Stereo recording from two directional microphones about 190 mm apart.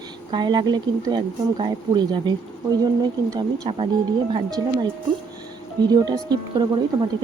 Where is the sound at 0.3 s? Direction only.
20° right (ahead or behind).